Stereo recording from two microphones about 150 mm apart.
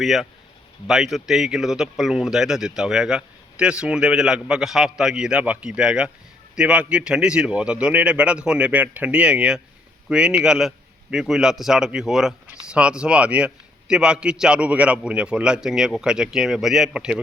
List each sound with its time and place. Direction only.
0.0 s a man's voice: centre (ahead or behind)